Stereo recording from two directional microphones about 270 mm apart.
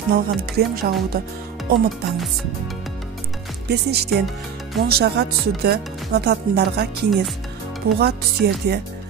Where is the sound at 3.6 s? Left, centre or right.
Right.